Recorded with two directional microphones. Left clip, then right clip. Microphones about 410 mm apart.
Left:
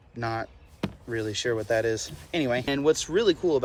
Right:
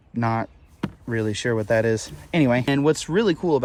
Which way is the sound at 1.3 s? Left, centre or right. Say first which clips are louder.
Right 4 dB; centre.